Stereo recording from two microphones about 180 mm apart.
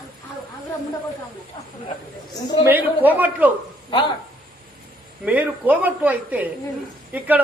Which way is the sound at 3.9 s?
30° left (ahead or behind).